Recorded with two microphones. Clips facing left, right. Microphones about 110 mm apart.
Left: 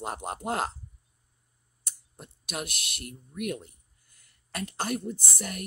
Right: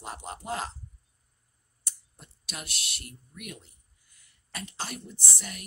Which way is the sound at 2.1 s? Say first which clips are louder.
Left 7 dB; 55° left (ahead or behind).